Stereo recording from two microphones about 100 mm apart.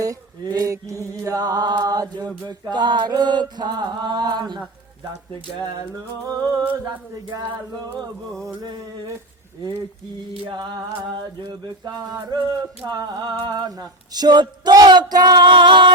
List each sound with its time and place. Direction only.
0.0 s mantra: 35° right (ahead or behind)
2.2 s a sound: 10° left (ahead or behind)
2.6 s male singing: 50° right (ahead or behind)
11.4 s male singing: 45° right (ahead or behind)